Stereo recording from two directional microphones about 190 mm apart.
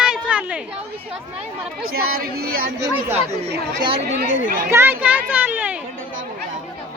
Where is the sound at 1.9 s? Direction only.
50° right (ahead or behind).